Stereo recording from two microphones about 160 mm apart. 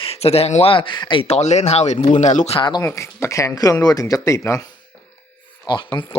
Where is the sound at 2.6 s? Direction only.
25° left (ahead or behind).